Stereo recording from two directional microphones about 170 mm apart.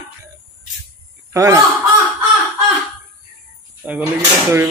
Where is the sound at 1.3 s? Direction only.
20° right (ahead or behind).